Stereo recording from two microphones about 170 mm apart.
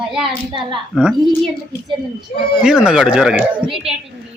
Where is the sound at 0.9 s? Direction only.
5° right (ahead or behind).